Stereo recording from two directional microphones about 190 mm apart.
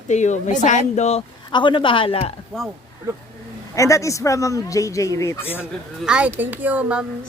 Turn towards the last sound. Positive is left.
turn(degrees=-5)  # may be behind; listen again after turning